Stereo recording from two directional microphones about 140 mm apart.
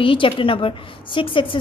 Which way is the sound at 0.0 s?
35° left (ahead or behind).